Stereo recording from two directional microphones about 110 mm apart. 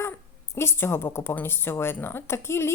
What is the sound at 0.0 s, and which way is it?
A woman's voice, 20° left (ahead or behind).